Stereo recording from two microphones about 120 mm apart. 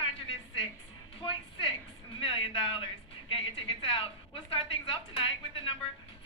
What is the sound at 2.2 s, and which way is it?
A woman's voice, 50° left (ahead or behind).